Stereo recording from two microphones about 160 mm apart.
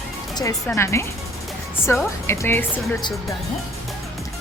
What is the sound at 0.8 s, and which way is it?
A woman's voice, 15° left (ahead or behind).